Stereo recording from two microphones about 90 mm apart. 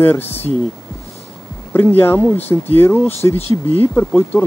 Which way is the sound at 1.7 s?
25° left (ahead or behind).